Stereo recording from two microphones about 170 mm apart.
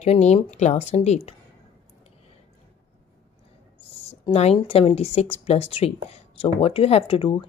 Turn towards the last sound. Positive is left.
turn(degrees=30)  # may be behind; listen again after turning